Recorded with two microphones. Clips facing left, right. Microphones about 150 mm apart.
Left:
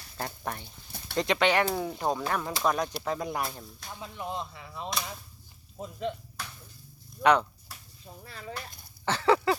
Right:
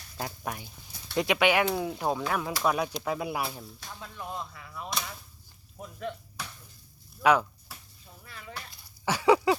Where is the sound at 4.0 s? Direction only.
20° left (ahead or behind).